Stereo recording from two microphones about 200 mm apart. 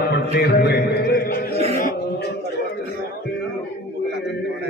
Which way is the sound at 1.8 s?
45° left (ahead or behind).